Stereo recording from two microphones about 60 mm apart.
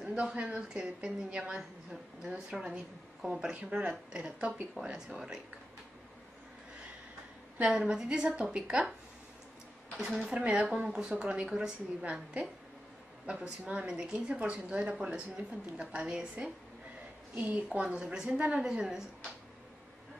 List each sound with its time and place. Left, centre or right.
0.0 s a woman's voice: centre
7.7 s a woman's voice: centre
9.9 s a woman's voice: centre
12.0 s a woman's voice: right
17.4 s a woman's voice: right
17.6 s a woman's voice: centre